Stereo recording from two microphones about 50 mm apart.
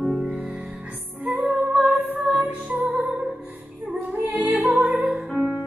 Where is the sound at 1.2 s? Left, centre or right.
Right.